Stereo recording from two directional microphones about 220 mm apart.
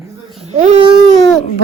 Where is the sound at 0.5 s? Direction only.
30° right (ahead or behind).